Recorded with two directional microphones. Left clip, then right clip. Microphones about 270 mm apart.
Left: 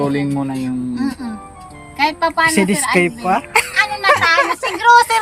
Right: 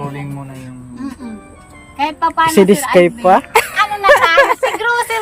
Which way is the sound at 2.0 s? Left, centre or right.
Centre.